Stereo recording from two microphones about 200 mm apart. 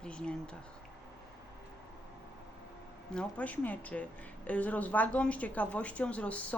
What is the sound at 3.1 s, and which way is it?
A woman's voice, 5° left (ahead or behind).